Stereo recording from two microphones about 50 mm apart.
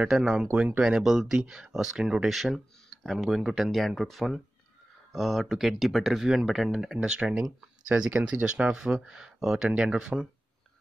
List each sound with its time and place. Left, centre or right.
0.1 s speech: centre
0.5 s speech: right
0.8 s speech: centre
7.0 s speech: centre
9.7 s speech: right